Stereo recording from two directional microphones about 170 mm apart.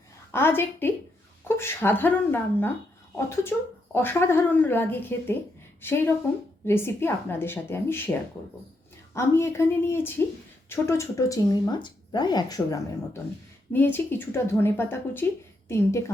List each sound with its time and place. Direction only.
0.3 s speech: 15° left (ahead or behind)
9.1 s speech: 15° left (ahead or behind)